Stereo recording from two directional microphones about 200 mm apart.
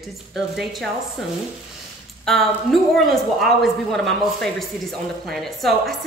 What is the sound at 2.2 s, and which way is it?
A woman's voice, centre (ahead or behind).